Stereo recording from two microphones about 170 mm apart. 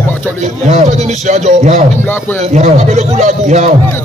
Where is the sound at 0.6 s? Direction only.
40° right (ahead or behind).